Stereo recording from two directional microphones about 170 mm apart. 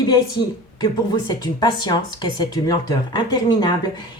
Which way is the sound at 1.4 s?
25° left (ahead or behind).